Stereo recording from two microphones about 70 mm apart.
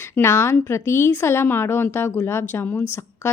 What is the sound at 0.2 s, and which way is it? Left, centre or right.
Speech, left.